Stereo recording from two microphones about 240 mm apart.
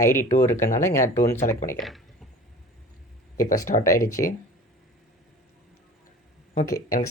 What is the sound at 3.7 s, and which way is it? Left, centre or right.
Speech, left.